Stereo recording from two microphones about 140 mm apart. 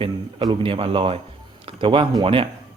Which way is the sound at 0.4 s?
40° right (ahead or behind).